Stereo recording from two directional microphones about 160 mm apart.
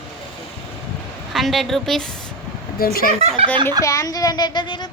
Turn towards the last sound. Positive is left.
turn(degrees=30)  # may be behind; listen again after turning